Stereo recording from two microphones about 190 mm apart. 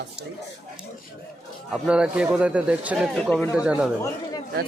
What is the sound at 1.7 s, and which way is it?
Speech, 5° right (ahead or behind).